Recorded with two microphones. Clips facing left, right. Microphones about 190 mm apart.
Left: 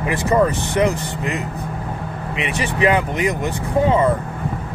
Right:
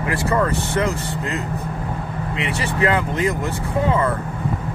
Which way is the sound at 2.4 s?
20° left (ahead or behind).